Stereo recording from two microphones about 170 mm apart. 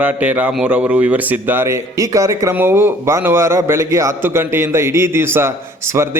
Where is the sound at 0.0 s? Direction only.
10° right (ahead or behind).